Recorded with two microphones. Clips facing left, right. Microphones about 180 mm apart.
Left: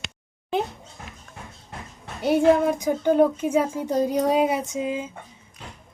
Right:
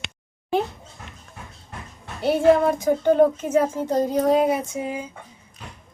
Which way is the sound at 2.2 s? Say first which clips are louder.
Right 1 dB; 15° left (ahead or behind).